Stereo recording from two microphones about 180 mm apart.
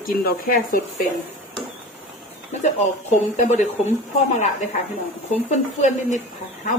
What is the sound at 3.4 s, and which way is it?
Speech, 40° left (ahead or behind).